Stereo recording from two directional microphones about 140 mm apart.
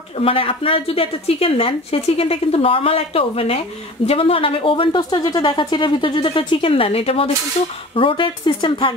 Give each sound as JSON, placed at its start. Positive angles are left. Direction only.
{"t": 0.2, "sound": "a woman's voice", "side_deg": 40}